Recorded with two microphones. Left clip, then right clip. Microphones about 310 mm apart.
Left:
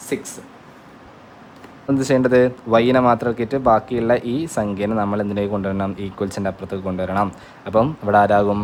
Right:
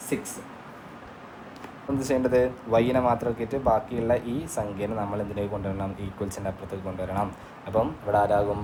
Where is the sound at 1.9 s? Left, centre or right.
Left.